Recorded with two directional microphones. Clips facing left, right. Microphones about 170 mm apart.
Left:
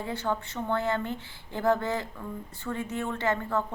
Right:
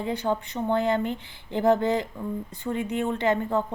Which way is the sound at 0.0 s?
15° right (ahead or behind).